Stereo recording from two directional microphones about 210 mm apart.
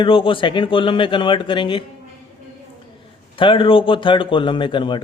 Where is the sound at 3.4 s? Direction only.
25° left (ahead or behind).